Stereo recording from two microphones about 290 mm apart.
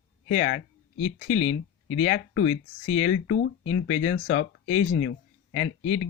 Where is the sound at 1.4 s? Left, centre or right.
Centre.